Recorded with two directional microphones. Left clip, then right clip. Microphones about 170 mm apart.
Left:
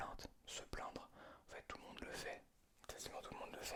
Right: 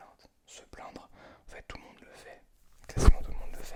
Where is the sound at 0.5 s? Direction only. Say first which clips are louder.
Right 1 dB; 20° left (ahead or behind).